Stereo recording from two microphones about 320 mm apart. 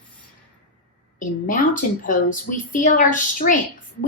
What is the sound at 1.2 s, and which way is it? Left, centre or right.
A woman's voice, left.